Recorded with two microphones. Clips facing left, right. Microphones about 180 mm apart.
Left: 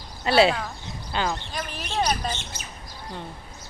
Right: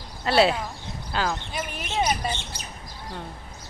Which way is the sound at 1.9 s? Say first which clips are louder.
Even; 20° right (ahead or behind).